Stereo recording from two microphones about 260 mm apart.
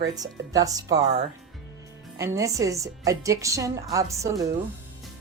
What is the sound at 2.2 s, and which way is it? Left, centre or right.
A woman's voice, centre.